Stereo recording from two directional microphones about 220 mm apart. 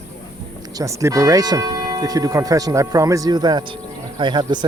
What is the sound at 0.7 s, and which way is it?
Speech, 15° right (ahead or behind).